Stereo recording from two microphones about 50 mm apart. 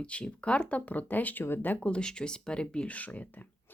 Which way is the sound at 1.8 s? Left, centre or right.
Left.